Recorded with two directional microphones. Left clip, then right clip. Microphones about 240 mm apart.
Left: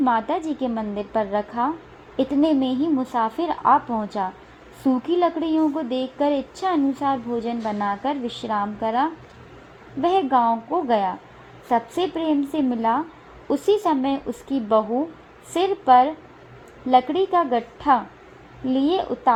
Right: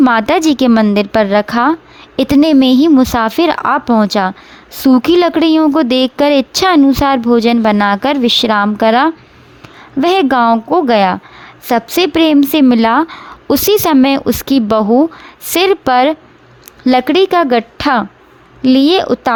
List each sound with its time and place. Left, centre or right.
0.0 s a woman's voice: right